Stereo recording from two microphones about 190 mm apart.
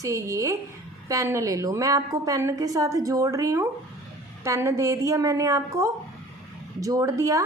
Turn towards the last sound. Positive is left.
turn(degrees=-15)  # may be behind; listen again after turning